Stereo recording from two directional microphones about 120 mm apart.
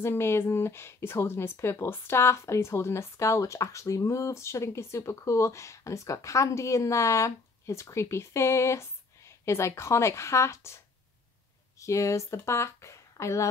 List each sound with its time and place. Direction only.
0.0 s speech: 20° left (ahead or behind)
11.8 s speech: 25° left (ahead or behind)